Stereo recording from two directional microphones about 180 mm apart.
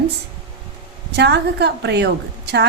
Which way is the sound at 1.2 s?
70° right (ahead or behind).